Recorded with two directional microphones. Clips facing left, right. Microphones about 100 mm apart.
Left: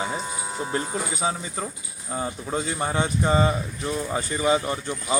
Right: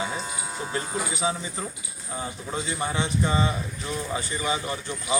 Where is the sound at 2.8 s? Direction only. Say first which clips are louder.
Left 2 dB; 45° left (ahead or behind).